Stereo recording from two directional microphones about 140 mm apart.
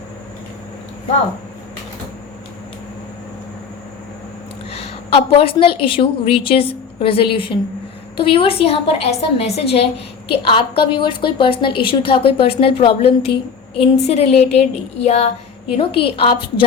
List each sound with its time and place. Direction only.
4.7 s a woman's voice: 45° left (ahead or behind)